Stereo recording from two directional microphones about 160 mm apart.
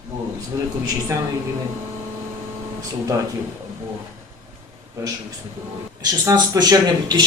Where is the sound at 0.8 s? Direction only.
20° right (ahead or behind).